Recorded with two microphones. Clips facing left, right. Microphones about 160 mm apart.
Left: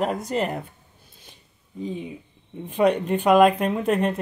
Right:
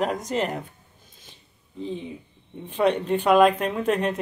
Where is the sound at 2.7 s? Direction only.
10° left (ahead or behind).